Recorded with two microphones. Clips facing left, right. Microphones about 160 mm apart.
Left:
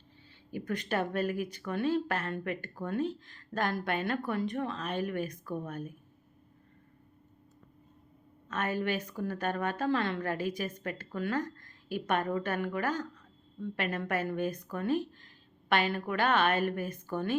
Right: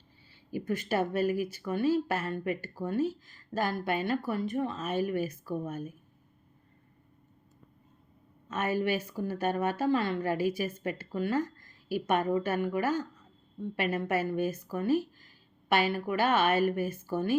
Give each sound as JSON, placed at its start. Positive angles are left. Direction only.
{"t": 0.5, "sound": "speech", "side_deg": -5}
{"t": 8.4, "sound": "a woman's voice", "side_deg": -10}